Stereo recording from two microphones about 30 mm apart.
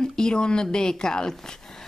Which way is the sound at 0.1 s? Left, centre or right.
Left.